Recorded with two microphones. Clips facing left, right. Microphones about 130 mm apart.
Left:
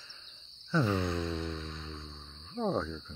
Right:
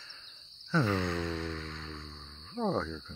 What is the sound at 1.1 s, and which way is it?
Music, 15° left (ahead or behind).